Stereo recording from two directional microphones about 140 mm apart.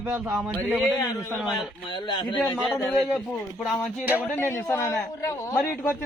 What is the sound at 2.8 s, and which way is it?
A man's voice, centre (ahead or behind).